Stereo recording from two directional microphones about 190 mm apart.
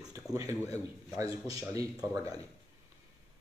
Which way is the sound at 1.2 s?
15° right (ahead or behind).